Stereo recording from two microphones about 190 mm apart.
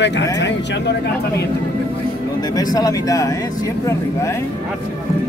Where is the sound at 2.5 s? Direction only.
20° left (ahead or behind).